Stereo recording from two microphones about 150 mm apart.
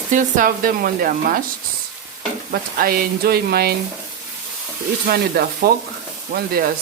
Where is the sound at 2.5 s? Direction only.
75° right (ahead or behind).